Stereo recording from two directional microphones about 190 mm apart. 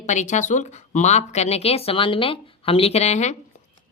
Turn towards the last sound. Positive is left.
turn(degrees=35)  # may be behind; listen again after turning